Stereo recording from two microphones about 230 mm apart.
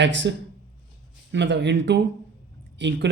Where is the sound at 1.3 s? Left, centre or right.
Right.